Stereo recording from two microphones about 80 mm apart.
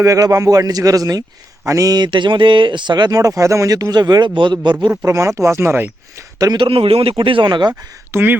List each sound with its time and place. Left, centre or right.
0.0 s a man's voice: right
2.0 s speech: right
5.0 s speech: right
6.4 s speech: right
7.2 s speech: right
8.1 s speech: right